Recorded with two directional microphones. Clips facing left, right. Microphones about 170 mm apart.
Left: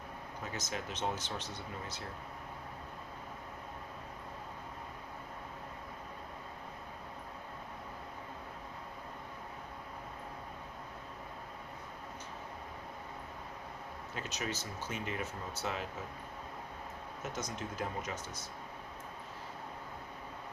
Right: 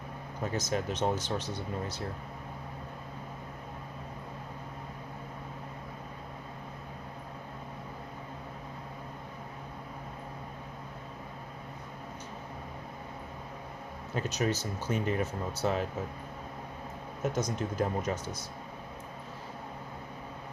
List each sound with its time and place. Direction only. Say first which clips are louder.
0.5 s speech: right 9 dB; 40° right (ahead or behind)
14.2 s speech: right 9 dB; 40° right (ahead or behind)
17.3 s speech: right 7 dB; 40° right (ahead or behind)